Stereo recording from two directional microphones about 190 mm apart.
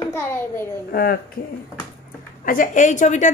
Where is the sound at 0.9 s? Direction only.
50° left (ahead or behind).